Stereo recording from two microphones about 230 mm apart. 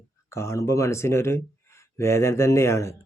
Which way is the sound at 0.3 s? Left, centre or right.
Centre.